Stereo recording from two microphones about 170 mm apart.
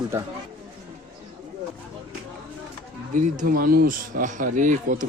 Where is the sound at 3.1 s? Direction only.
50° right (ahead or behind).